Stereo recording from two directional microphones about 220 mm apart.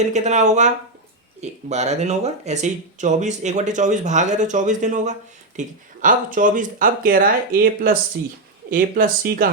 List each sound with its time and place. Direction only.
0.0 s speech: 30° right (ahead or behind)